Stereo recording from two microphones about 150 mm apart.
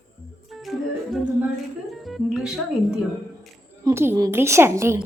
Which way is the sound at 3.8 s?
15° right (ahead or behind).